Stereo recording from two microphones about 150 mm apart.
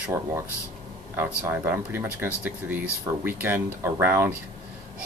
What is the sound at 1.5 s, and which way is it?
Speech, 15° right (ahead or behind).